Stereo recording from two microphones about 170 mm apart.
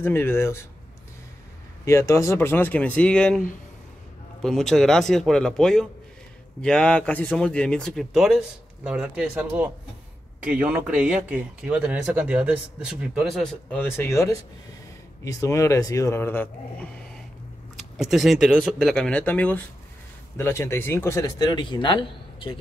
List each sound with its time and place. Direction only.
0.0 s speech: 15° left (ahead or behind)
1.9 s speech: 15° left (ahead or behind); by 9.5 s 5° right (ahead or behind)
10.5 s speech: 10° right (ahead or behind); by 17.2 s 10° left (ahead or behind)
17.7 s speech: centre (ahead or behind); by 22.6 s 30° left (ahead or behind)